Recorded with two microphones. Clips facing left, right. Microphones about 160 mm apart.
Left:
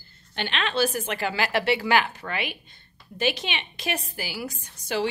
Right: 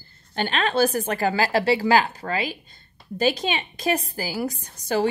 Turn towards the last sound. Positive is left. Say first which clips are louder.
# right 4 dB
turn(degrees=-45)  # may be behind; listen again after turning